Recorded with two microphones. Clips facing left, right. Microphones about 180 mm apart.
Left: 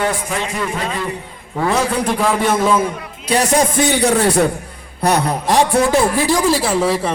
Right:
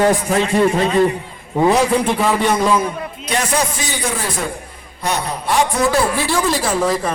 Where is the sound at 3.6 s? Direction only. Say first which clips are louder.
Left 7 dB; 60° left (ahead or behind).